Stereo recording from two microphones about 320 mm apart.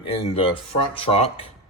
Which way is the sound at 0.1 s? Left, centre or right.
Centre.